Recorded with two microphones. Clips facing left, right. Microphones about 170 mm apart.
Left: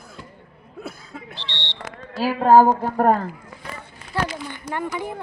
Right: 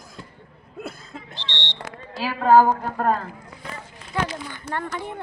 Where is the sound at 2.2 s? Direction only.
40° left (ahead or behind).